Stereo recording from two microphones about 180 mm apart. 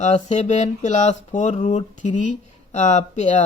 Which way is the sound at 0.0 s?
40° left (ahead or behind).